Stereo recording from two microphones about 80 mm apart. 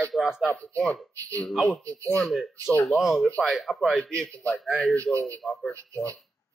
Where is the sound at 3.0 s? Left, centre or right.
Centre.